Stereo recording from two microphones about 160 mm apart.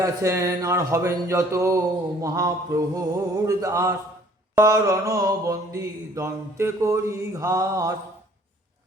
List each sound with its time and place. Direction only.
0.0 s mantra: 20° right (ahead or behind)